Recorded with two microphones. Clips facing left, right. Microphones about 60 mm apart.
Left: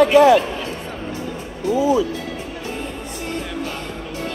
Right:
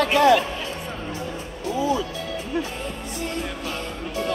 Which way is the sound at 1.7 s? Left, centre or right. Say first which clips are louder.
Left 6 dB; centre.